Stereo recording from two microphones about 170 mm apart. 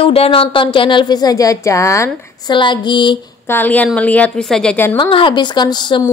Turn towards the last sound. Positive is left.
turn(degrees=25)  # may be behind; listen again after turning